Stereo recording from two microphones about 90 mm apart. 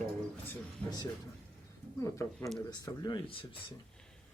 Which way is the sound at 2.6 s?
50° left (ahead or behind).